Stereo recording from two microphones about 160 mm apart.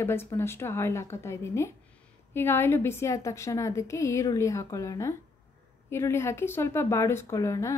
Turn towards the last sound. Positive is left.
turn(degrees=20)  # may be behind; listen again after turning